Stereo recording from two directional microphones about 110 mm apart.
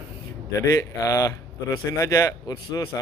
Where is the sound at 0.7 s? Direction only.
30° left (ahead or behind).